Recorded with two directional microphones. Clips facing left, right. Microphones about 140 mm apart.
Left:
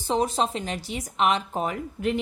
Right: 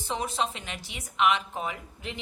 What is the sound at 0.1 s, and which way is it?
A woman's voice, 35° left (ahead or behind).